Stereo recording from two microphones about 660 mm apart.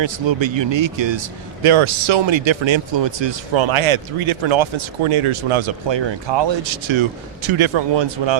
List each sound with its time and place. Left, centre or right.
0.0 s speech: right